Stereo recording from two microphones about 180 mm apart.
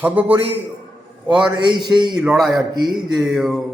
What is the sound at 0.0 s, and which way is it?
Speech, 10° right (ahead or behind).